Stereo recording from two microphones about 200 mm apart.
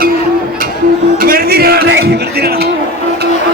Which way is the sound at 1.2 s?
45° right (ahead or behind).